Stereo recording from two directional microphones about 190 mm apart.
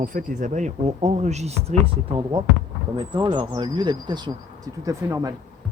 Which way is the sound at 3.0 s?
25° right (ahead or behind).